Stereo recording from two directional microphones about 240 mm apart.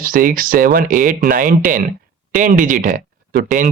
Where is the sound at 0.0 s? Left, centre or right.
Right.